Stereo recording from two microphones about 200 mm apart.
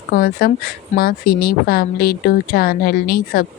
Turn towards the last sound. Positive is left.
turn(degrees=45)  # may be behind; listen again after turning